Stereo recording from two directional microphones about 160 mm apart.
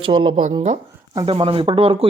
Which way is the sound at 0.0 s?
30° right (ahead or behind).